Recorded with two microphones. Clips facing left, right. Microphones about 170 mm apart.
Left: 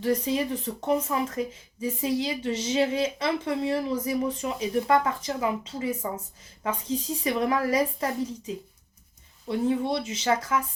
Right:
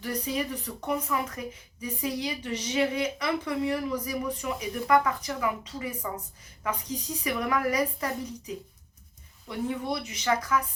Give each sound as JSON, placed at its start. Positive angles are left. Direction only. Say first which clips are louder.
{"t": 0.0, "sound": "speech", "louder": "left 5 dB", "side_deg": 30}
{"t": 9.5, "sound": "speech", "louder": "left 5 dB", "side_deg": 30}